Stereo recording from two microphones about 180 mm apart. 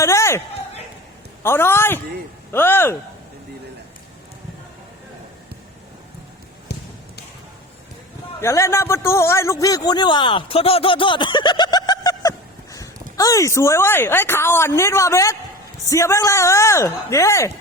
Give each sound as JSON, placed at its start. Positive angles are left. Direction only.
{"t": 0.0, "sound": "a sound", "side_deg": 15}
{"t": 1.4, "sound": "speech", "side_deg": 15}
{"t": 6.7, "sound": "basketball bounce", "side_deg": 65}
{"t": 8.4, "sound": "a man's voice", "side_deg": 15}